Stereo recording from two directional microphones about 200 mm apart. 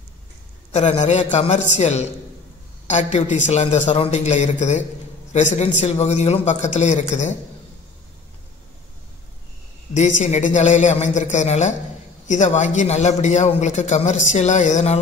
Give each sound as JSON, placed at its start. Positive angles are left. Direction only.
{"t": 0.7, "sound": "a man's voice", "side_deg": 35}
{"t": 9.9, "sound": "a man's voice", "side_deg": 35}